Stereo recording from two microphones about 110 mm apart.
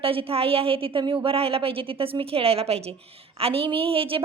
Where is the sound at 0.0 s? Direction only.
55° right (ahead or behind).